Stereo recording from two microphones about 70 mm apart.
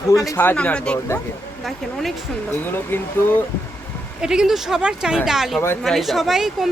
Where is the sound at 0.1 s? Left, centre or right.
Left.